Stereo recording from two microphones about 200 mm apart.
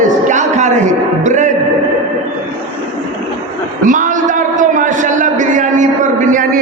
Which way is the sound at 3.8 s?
40° right (ahead or behind).